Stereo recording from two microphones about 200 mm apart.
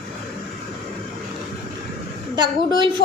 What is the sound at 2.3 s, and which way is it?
Speech, 25° right (ahead or behind).